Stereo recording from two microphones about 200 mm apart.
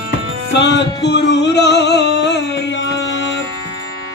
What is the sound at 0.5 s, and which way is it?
Music, 60° left (ahead or behind).